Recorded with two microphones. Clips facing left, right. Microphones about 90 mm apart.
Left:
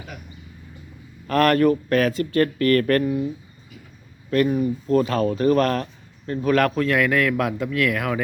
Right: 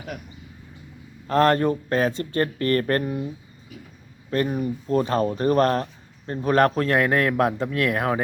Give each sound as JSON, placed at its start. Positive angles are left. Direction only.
{"t": 1.3, "sound": "speech", "side_deg": -25}
{"t": 4.3, "sound": "speech", "side_deg": -30}